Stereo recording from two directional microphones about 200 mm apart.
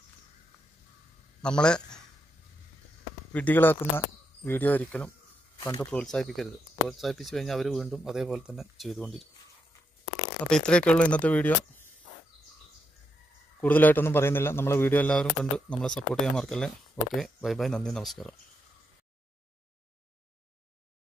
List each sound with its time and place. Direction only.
1.4 s a man's voice: 5° left (ahead or behind)
3.3 s a man's voice: 10° left (ahead or behind)
10.5 s a man's voice: 5° left (ahead or behind)
13.6 s a man's voice: 10° left (ahead or behind)